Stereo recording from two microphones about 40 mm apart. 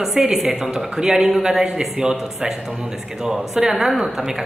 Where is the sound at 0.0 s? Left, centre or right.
Centre.